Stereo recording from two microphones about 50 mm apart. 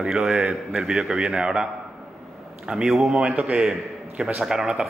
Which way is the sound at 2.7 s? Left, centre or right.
Centre.